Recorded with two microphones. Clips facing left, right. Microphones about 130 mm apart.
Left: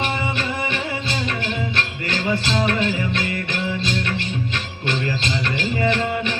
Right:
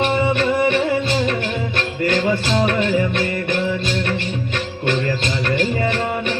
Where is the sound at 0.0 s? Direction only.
50° right (ahead or behind).